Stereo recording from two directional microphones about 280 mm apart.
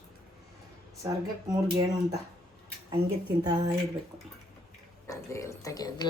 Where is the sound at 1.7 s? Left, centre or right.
Centre.